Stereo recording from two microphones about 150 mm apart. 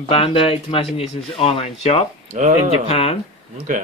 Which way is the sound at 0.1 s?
40° left (ahead or behind).